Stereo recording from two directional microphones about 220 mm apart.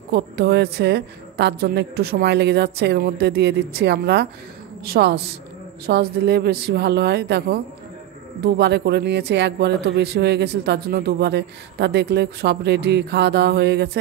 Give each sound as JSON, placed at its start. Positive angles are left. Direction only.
{"t": 0.1, "sound": "speech", "side_deg": -45}